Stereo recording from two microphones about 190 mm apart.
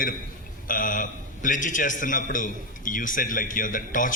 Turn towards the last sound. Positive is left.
turn(degrees=45)  # may be behind; listen again after turning